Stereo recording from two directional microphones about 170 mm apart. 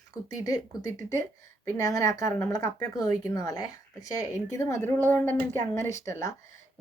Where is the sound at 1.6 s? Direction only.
20° left (ahead or behind).